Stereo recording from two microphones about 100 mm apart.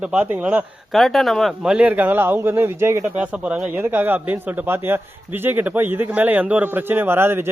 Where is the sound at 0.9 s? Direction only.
Centre (ahead or behind); by 3.0 s 25° right (ahead or behind).